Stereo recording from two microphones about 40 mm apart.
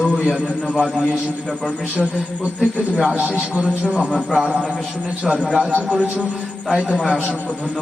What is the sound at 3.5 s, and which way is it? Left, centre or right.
Speech, right.